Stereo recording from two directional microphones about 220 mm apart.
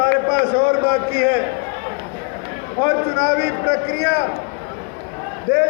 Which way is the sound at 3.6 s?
50° left (ahead or behind).